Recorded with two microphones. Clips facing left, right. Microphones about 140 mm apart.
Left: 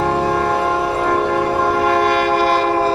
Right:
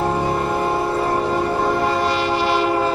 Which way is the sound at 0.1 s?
75° left (ahead or behind).